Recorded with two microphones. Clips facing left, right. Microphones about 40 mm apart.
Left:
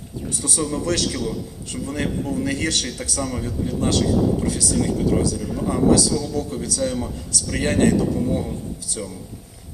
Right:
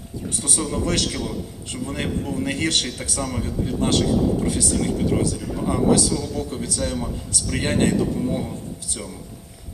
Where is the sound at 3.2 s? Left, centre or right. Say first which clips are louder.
Even; right.